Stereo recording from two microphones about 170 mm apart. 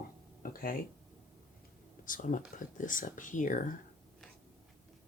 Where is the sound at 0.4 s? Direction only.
55° left (ahead or behind).